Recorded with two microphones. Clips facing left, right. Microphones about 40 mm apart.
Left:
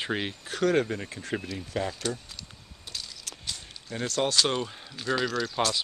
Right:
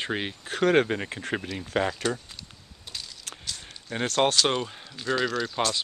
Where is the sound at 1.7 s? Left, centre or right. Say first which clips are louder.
Right 5 dB; right.